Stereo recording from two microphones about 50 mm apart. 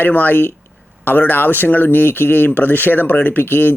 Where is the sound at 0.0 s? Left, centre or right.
Left.